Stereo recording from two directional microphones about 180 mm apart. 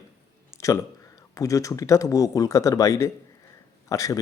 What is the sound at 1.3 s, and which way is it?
A man's voice, 15° left (ahead or behind).